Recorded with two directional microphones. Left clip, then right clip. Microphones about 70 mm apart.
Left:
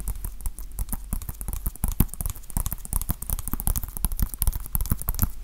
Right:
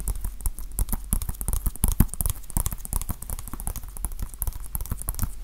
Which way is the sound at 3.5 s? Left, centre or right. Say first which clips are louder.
Left 4 dB; left.